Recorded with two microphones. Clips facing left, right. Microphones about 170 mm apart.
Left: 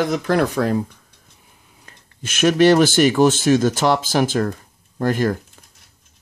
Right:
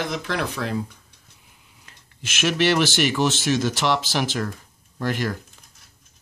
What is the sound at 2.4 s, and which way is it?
Speech, 45° left (ahead or behind).